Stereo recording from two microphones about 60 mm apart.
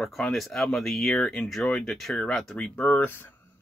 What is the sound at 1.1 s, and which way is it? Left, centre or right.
Speech, centre.